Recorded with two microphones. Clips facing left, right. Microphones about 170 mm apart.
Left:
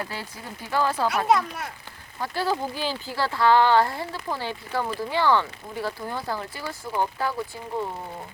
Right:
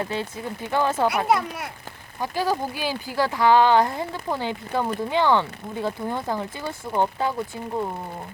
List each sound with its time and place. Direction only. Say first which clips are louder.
0.0 s speech: right 6 dB; 20° right (ahead or behind)
1.0 s speech: right 1 dB; 10° right (ahead or behind)